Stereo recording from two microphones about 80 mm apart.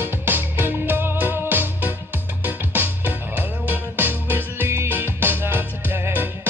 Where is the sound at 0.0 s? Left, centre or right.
Right.